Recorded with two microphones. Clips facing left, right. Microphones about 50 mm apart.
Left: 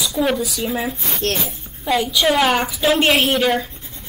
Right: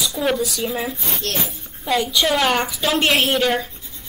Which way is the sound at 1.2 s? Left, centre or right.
Left.